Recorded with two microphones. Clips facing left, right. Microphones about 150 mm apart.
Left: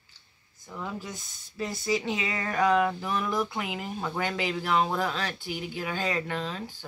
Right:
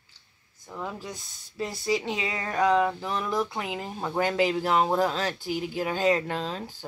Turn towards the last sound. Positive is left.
turn(degrees=-35)  # may be behind; listen again after turning